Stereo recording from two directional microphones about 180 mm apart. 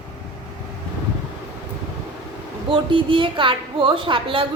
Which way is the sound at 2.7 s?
30° right (ahead or behind).